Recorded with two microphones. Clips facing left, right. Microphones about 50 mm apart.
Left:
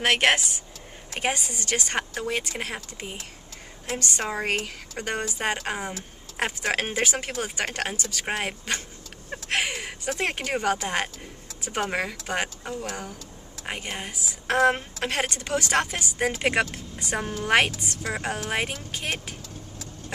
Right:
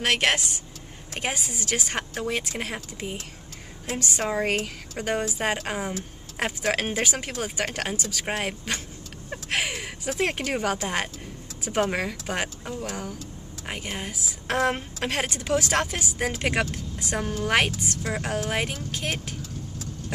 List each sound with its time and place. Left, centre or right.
0.0 s speech: centre
1.2 s a woman's voice: centre